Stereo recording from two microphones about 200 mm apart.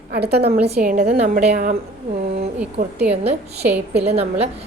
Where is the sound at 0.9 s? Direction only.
40° right (ahead or behind).